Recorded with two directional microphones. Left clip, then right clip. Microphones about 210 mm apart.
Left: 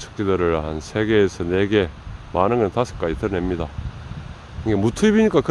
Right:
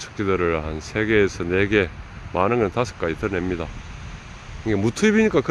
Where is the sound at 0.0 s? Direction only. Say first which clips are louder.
Left 1 dB; 15° left (ahead or behind).